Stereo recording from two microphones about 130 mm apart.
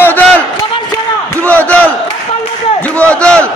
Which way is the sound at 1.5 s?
10° left (ahead or behind).